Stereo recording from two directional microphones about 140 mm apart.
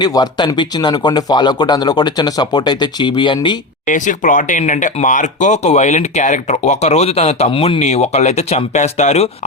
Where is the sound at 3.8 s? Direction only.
65° left (ahead or behind).